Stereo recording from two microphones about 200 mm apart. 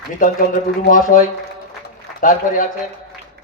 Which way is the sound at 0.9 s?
40° left (ahead or behind).